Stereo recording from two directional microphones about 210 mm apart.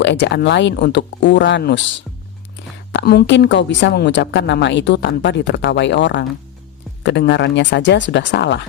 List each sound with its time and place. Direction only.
0.0 s speech: 55° left (ahead or behind)
2.9 s speech: 50° left (ahead or behind)